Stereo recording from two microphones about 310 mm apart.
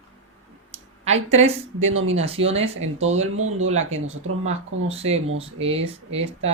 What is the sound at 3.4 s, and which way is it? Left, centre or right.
Speech, right.